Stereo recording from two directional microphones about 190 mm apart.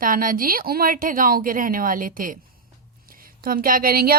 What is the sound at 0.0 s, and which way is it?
A woman's voice, 45° right (ahead or behind).